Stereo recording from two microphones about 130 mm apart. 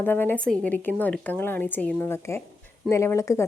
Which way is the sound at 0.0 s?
15° left (ahead or behind).